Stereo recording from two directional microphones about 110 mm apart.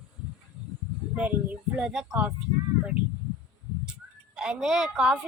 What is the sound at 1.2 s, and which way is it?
Speech, 10° right (ahead or behind).